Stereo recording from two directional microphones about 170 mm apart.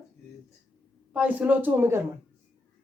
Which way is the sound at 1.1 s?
10° right (ahead or behind).